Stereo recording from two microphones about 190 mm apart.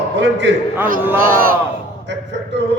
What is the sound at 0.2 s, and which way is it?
Speech, 70° right (ahead or behind).